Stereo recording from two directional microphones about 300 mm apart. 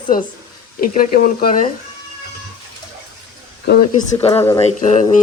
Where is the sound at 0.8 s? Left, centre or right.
Left.